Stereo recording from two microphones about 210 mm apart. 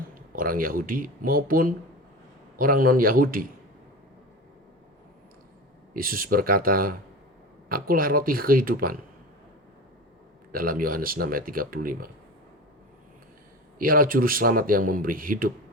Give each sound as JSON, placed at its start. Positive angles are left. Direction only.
{"t": 0.1, "sound": "speech", "side_deg": -40}
{"t": 5.9, "sound": "speech", "side_deg": -40}
{"t": 10.5, "sound": "speech", "side_deg": -45}
{"t": 13.7, "sound": "speech", "side_deg": -40}